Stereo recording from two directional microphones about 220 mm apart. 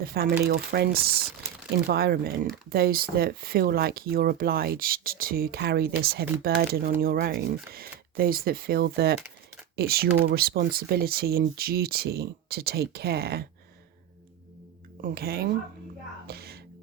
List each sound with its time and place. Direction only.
0.0 s speech: 45° right (ahead or behind)
15.0 s speech: 45° right (ahead or behind)
16.2 s music: 45° right (ahead or behind)